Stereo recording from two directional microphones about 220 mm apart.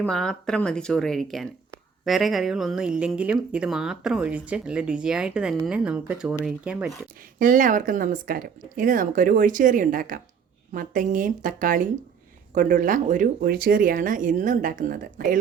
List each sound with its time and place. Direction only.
0.1 s a woman's voice: 5° left (ahead or behind)
7.3 s speech: 35° right (ahead or behind)